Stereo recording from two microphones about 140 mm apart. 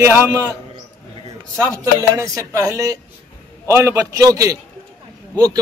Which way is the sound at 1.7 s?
25° right (ahead or behind).